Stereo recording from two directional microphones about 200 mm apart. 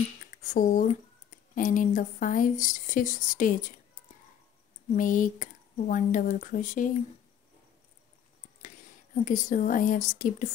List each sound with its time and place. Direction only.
0.5 s speech: 40° left (ahead or behind)
4.9 s speech: 40° left (ahead or behind)
8.6 s speech: 40° left (ahead or behind)